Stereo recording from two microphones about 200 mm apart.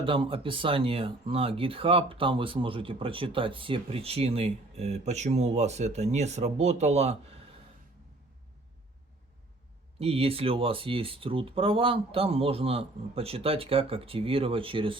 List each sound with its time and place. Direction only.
0.0 s speech: 25° right (ahead or behind)
10.0 s speech: 30° right (ahead or behind)